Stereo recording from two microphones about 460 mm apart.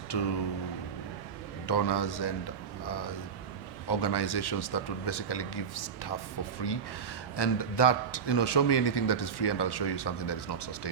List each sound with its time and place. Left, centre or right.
0.1 s a man's voice: left
1.6 s a man's voice: left
2.8 s a sound: left
3.8 s a man's voice: left